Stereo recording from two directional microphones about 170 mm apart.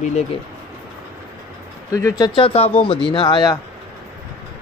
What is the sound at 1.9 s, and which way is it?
Speech, 20° left (ahead or behind).